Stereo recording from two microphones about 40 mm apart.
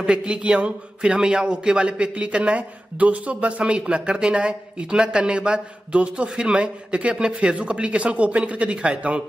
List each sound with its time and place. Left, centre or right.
0.0 s a man's voice: right